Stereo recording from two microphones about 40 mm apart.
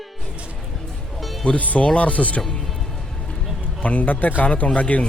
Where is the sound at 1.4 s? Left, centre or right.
Left.